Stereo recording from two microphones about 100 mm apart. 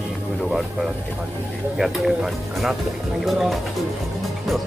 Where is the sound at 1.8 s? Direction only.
5° right (ahead or behind).